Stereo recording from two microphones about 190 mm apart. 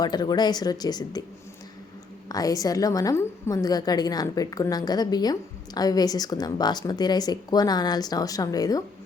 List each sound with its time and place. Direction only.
0.0 s a woman's voice: 20° left (ahead or behind)
2.3 s a woman's voice: 20° left (ahead or behind)